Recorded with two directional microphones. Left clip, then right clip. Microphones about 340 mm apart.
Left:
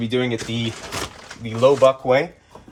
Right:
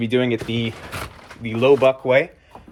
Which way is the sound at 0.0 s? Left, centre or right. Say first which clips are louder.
Right 2 dB; centre.